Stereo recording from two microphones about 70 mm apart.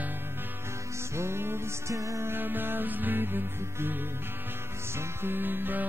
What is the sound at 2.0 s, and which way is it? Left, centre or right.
Music, right.